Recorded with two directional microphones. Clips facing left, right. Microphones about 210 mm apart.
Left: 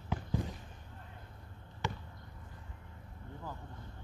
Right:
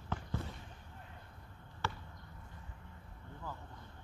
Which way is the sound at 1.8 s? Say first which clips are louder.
Left 2 dB; 15° left (ahead or behind).